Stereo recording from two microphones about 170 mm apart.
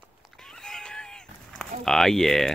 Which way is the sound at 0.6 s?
5° left (ahead or behind).